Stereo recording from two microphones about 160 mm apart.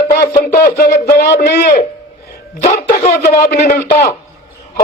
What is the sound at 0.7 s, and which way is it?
Speech, 70° left (ahead or behind).